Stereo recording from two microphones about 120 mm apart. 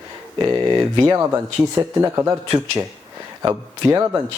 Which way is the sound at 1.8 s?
15° right (ahead or behind).